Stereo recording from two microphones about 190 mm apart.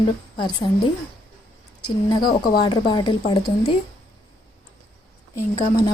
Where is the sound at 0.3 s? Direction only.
25° left (ahead or behind).